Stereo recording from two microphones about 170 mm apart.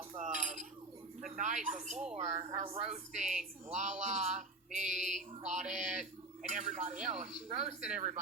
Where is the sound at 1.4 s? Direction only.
45° right (ahead or behind).